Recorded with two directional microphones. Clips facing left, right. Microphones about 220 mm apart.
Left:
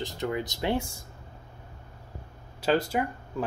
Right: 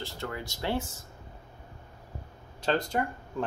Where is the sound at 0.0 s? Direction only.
20° left (ahead or behind).